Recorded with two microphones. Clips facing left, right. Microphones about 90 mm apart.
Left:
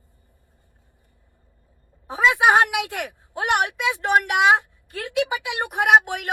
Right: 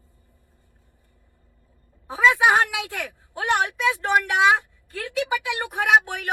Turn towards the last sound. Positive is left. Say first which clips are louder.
# left 2 dB
turn(degrees=20)  # may be behind; listen again after turning